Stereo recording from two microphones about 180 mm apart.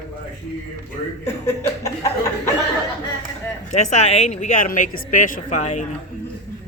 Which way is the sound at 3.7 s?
40° left (ahead or behind).